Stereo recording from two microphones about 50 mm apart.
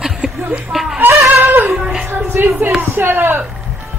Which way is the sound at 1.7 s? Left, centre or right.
Centre.